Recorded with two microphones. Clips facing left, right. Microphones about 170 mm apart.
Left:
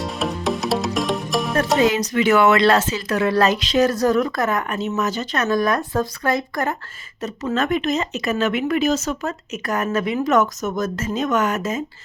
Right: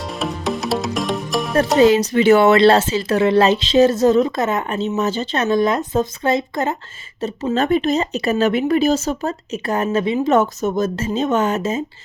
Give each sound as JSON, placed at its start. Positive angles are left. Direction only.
{"t": 0.0, "sound": "music", "side_deg": 0}
{"t": 1.8, "sound": "speech", "side_deg": -30}